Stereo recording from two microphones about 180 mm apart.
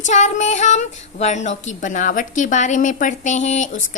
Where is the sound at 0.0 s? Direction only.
40° left (ahead or behind).